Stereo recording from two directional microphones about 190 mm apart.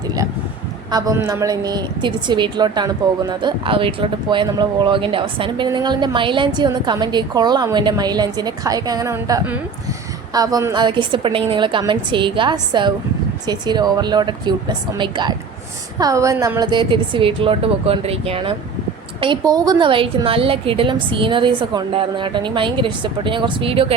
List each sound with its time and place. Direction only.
0.9 s a woman's voice: 20° right (ahead or behind)